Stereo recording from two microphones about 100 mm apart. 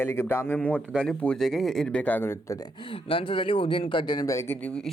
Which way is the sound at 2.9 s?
60° left (ahead or behind).